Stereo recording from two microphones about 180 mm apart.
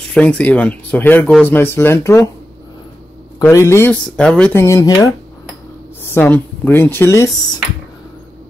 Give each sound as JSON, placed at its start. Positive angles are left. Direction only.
{"t": 0.1, "sound": "speech", "side_deg": 5}
{"t": 3.3, "sound": "speech", "side_deg": 15}